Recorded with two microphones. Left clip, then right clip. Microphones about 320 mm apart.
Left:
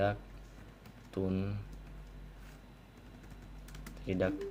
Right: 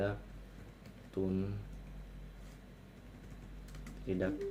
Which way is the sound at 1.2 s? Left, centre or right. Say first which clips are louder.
Left 1 dB; left.